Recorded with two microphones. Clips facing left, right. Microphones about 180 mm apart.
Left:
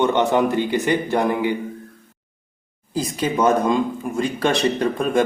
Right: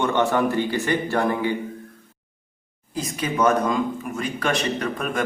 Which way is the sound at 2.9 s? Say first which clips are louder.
Left 3 dB; 25° left (ahead or behind).